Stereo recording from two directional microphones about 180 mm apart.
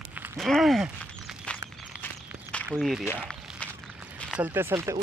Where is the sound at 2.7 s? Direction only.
Centre (ahead or behind).